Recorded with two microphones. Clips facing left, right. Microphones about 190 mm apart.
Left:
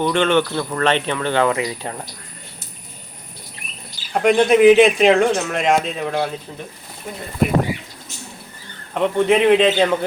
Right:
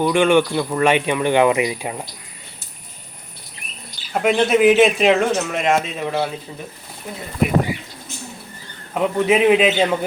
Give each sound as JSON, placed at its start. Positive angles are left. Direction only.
{"t": 0.0, "sound": "speech", "side_deg": -10}
{"t": 4.1, "sound": "a man's voice", "side_deg": -5}
{"t": 9.0, "sound": "a man's voice", "side_deg": -5}